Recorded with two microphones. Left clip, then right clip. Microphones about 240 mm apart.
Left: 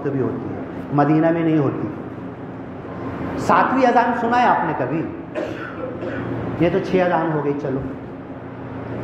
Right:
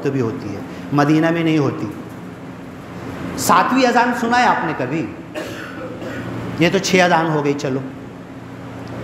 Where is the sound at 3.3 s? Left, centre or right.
Right.